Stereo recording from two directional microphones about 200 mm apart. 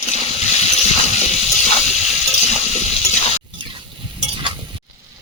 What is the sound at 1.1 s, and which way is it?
Water, 35° left (ahead or behind).